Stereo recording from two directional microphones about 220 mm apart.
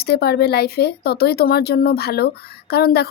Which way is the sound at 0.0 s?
45° left (ahead or behind).